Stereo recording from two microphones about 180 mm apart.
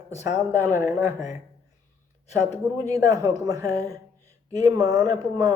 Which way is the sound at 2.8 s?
20° right (ahead or behind).